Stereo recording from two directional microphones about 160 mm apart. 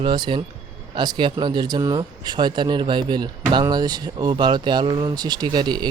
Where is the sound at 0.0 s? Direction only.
30° right (ahead or behind).